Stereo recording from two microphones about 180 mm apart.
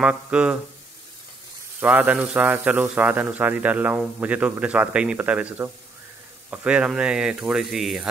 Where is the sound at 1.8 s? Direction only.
10° right (ahead or behind).